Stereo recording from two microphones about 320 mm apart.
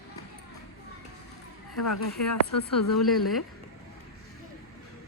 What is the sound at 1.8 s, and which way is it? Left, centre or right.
Speech, left.